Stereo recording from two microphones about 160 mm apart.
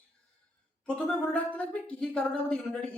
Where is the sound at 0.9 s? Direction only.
5° left (ahead or behind).